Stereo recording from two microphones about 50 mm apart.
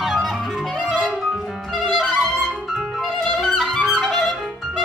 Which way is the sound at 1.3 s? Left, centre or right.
Centre.